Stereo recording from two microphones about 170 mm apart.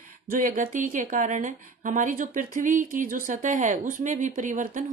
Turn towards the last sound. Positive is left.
turn(degrees=-50)  # may be behind; listen again after turning